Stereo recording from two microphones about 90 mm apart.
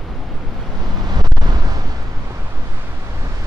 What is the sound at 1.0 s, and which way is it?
Vehicle, 50° right (ahead or behind).